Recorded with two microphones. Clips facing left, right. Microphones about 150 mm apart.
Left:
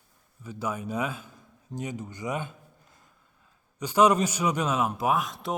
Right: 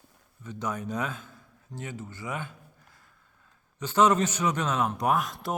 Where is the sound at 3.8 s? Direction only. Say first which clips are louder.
Left 1 dB; 10° left (ahead or behind).